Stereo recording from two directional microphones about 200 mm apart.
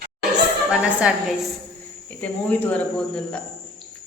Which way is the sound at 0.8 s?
5° right (ahead or behind).